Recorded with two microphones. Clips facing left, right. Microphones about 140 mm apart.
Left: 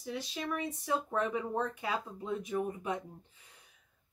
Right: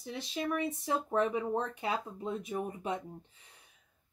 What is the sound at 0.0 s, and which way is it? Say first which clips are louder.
A woman's voice: right 2 dB; 25° right (ahead or behind).